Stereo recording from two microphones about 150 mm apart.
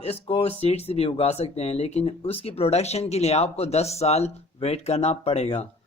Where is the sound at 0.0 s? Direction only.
40° left (ahead or behind).